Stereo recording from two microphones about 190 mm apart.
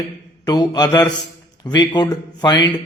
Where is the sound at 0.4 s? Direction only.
20° left (ahead or behind).